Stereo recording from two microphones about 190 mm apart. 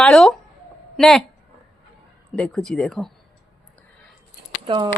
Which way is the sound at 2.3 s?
5° left (ahead or behind).